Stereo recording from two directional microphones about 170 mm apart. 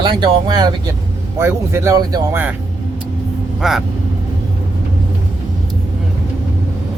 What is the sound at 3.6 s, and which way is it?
Speech, centre (ahead or behind).